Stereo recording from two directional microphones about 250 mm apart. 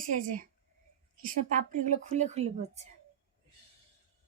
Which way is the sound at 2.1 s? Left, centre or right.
Right.